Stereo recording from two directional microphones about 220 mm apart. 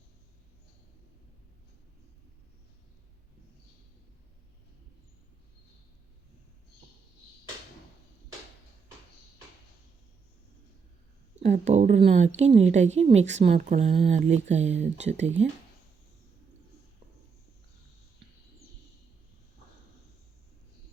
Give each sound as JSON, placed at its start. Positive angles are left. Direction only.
{"t": 11.4, "sound": "a woman's voice", "side_deg": -30}